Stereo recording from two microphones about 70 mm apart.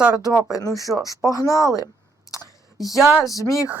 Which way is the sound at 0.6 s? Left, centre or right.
Left.